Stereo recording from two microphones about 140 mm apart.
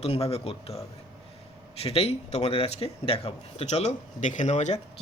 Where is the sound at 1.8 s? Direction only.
45° left (ahead or behind).